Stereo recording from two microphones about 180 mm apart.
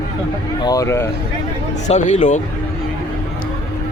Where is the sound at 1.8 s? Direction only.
40° left (ahead or behind).